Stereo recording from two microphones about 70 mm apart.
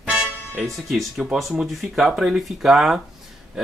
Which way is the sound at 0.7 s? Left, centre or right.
Centre.